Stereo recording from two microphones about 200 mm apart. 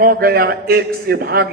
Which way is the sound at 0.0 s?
50° right (ahead or behind).